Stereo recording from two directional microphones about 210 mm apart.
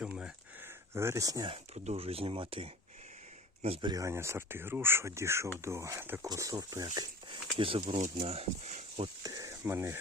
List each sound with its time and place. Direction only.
0.0 s a sound: 5° right (ahead or behind)
0.9 s speech: 15° right (ahead or behind)
1.7 s speech: 30° right (ahead or behind)
9.2 s speech: 15° right (ahead or behind)